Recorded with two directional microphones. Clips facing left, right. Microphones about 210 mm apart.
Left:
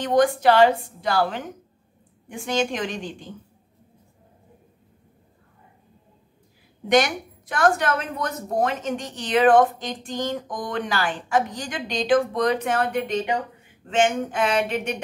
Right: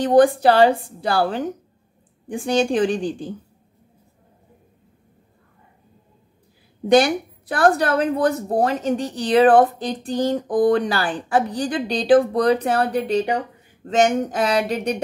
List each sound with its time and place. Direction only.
0.0 s a woman's voice: 35° right (ahead or behind)
6.9 s a woman's voice: 35° right (ahead or behind)